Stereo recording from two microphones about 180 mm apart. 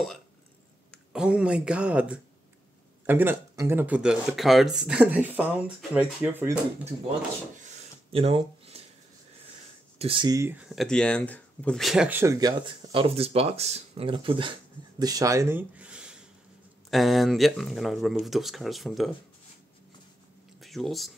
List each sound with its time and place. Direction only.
0.9 s speech: 5° right (ahead or behind)
7.7 s a sound: 30° right (ahead or behind)
9.9 s speech: 30° right (ahead or behind); by 19.1 s centre (ahead or behind)
20.6 s speech: centre (ahead or behind)